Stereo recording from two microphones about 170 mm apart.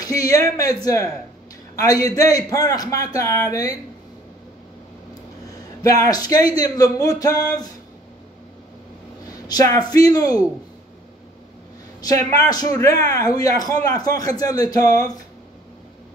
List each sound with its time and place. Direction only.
0.0 s a man's voice: 20° left (ahead or behind)
5.8 s a man's voice: 20° left (ahead or behind)
9.3 s a man's voice: 20° left (ahead or behind)
12.3 s a man's voice: 20° left (ahead or behind)